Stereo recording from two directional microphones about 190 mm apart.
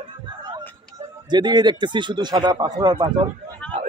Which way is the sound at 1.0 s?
25° right (ahead or behind).